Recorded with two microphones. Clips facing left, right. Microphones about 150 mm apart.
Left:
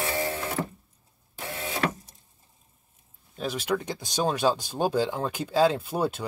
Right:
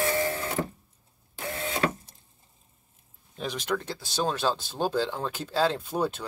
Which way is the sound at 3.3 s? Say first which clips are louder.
Left 2 dB; 5° left (ahead or behind).